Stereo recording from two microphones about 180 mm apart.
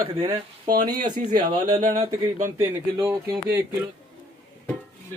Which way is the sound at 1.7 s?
35° right (ahead or behind).